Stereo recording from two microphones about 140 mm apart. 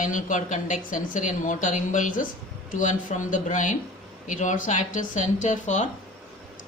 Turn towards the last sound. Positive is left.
turn(degrees=60)  # may be behind; listen again after turning